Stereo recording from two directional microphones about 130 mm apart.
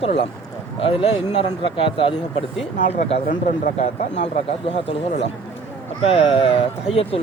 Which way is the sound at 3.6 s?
80° left.